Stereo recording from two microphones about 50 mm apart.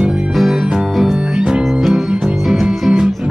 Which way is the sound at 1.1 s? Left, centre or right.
Centre.